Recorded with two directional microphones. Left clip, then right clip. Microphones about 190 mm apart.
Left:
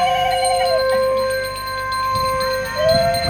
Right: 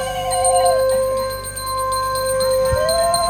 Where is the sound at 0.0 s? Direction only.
70° right (ahead or behind).